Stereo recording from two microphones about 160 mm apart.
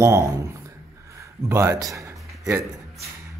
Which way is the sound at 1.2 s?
20° right (ahead or behind).